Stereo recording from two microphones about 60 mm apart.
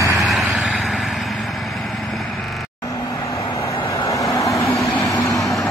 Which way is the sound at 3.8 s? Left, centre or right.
Left.